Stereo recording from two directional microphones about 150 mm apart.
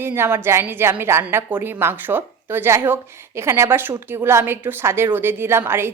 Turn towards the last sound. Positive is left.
turn(degrees=-15)  # may be behind; listen again after turning